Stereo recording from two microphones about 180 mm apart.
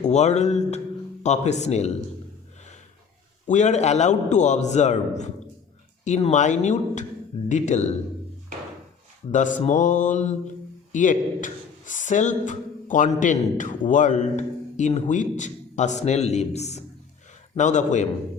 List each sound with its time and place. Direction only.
0.0 s a man's voice: 40° left (ahead or behind)
3.4 s a man's voice: 40° left (ahead or behind)
9.3 s a man's voice: 45° left (ahead or behind)